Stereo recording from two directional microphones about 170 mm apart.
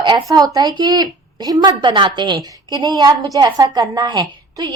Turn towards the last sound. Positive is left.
turn(degrees=-25)  # may be behind; listen again after turning